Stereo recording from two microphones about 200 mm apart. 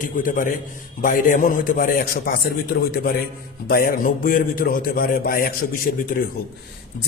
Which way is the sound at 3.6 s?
45° left (ahead or behind).